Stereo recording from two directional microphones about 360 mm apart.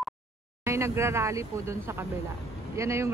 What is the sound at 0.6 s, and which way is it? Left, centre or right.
Speech, centre.